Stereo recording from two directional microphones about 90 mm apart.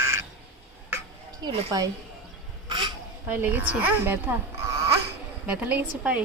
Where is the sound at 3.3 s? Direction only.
25° right (ahead or behind).